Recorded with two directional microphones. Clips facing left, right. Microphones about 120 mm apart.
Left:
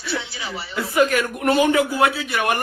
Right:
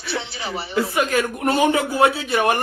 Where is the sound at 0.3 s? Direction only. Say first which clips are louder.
Right 3 dB; 50° right (ahead or behind).